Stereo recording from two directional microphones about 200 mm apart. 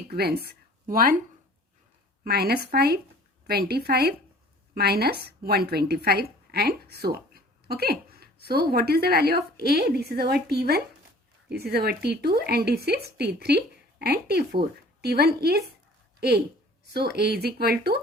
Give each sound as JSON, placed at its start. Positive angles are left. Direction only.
{"t": 0.1, "sound": "speech", "side_deg": -50}
{"t": 2.2, "sound": "a woman's voice", "side_deg": -50}
{"t": 16.9, "sound": "a woman's voice", "side_deg": -55}